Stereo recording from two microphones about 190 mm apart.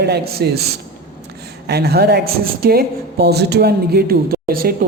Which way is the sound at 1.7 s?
55° right (ahead or behind).